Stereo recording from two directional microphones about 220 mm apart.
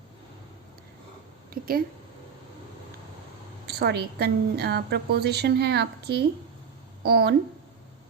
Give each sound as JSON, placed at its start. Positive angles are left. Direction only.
{"t": 1.5, "sound": "speech", "side_deg": -40}
{"t": 3.7, "sound": "a woman's voice", "side_deg": -45}